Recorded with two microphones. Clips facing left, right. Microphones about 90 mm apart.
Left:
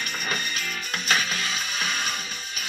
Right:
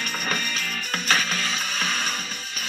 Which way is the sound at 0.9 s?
35° right (ahead or behind).